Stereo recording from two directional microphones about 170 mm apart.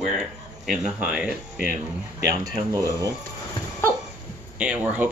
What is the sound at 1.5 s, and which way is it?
Speech, 55° left (ahead or behind).